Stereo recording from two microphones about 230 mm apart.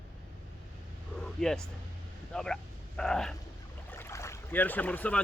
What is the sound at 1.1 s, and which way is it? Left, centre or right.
Vehicle, centre.